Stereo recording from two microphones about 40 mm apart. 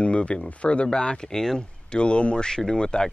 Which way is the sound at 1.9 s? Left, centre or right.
Left.